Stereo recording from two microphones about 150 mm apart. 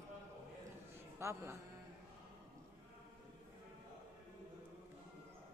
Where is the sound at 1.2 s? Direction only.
20° right (ahead or behind).